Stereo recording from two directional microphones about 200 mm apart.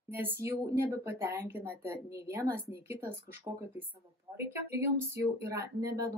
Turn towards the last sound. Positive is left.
turn(degrees=-15)  # may be behind; listen again after turning